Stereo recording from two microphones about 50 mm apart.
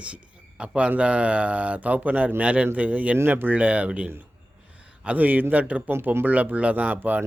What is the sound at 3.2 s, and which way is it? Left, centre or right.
A man's voice, right.